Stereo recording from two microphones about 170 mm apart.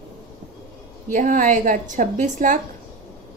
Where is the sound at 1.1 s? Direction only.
50° right (ahead or behind).